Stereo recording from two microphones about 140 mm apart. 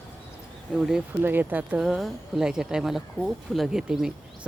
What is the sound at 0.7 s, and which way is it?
Speech, 5° right (ahead or behind).